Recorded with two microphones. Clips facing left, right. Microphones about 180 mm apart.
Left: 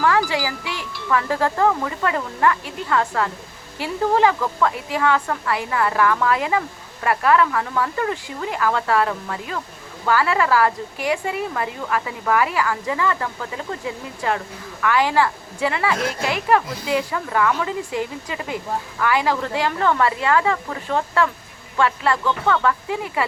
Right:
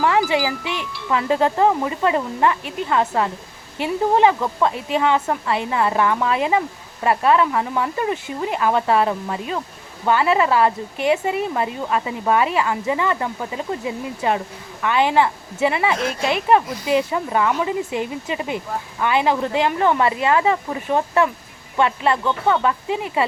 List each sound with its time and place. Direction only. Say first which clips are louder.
0.0 s a woman's voice: right 2 dB; 20° right (ahead or behind)